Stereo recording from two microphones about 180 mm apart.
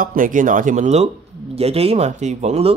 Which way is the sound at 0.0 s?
50° right (ahead or behind).